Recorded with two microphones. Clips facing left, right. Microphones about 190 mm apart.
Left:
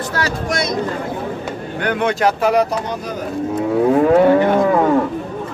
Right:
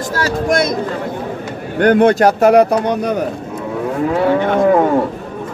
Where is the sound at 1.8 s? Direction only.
45° right (ahead or behind); by 3.2 s 65° right (ahead or behind).